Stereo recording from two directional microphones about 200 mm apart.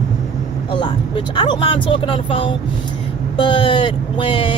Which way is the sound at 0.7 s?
25° left (ahead or behind).